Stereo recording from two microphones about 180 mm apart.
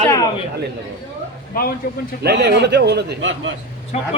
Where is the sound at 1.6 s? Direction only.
55° left (ahead or behind).